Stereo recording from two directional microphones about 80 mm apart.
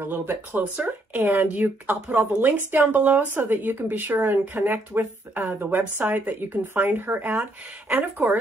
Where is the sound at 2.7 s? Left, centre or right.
Right.